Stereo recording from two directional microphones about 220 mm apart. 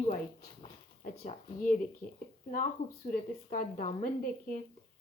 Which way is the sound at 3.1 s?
35° left (ahead or behind).